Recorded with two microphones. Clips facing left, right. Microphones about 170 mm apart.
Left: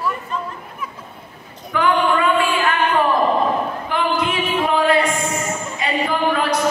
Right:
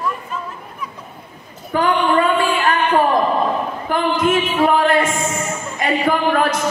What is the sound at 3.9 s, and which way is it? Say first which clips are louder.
Music: right 5 dB; 45° right (ahead or behind).